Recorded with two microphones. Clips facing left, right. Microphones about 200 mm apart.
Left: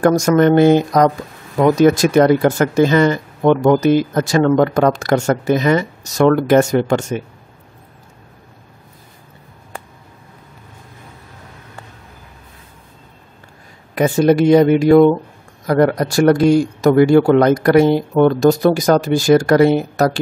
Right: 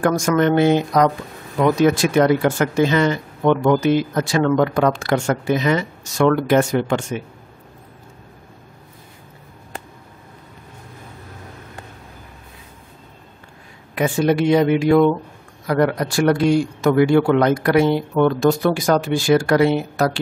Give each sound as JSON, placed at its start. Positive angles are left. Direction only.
{"t": 0.0, "sound": "a man's voice", "side_deg": 40}
{"t": 13.9, "sound": "a man's voice", "side_deg": 40}